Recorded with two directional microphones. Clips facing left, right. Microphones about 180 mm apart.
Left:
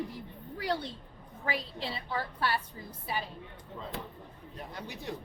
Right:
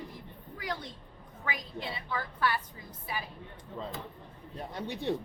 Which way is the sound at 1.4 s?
30° left (ahead or behind).